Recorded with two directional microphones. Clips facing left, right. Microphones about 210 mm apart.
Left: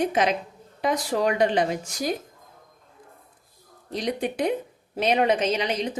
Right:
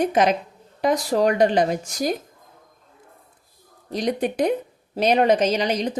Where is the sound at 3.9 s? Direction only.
45° right (ahead or behind).